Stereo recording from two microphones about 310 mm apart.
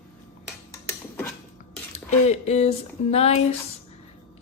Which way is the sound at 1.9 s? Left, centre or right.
Left.